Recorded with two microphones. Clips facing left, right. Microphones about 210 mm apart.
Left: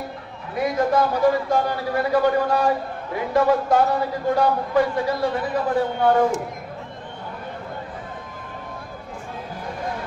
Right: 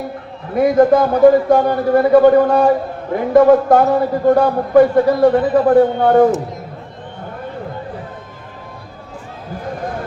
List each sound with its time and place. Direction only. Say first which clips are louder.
0.6 s a man's voice: right 9 dB; 55° right (ahead or behind)